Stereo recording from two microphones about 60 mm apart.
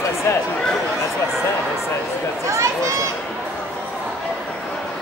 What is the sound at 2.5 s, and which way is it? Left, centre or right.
Speech, right.